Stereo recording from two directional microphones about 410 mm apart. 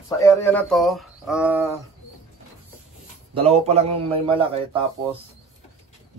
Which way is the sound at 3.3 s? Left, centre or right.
Centre.